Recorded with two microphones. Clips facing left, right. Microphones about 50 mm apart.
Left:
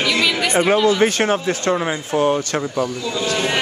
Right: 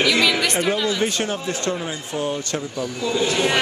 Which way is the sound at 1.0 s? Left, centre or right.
Left.